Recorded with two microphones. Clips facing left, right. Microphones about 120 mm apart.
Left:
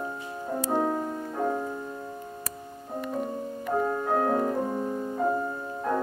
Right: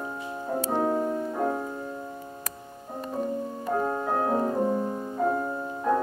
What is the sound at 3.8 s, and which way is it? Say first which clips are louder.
Music: left 3 dB; 20° right (ahead or behind).